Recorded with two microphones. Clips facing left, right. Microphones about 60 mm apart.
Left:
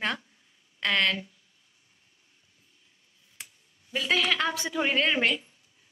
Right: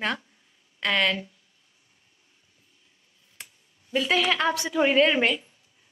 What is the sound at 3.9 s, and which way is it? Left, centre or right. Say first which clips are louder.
A woman's voice: right 3 dB; centre.